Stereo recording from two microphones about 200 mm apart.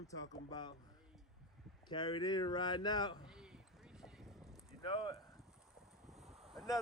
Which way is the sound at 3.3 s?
5° right (ahead or behind).